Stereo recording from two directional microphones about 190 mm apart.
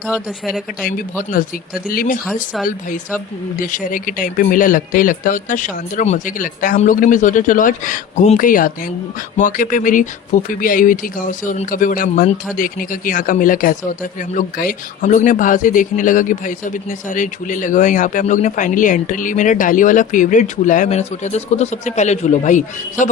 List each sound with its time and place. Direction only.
0.1 s speech: 5° right (ahead or behind)
1.9 s speech: 50° left (ahead or behind)
2.2 s speech: centre (ahead or behind)
3.6 s speech: 45° left (ahead or behind)